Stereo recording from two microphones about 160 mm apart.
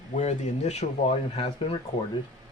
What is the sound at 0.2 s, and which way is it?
Speech, 45° left (ahead or behind).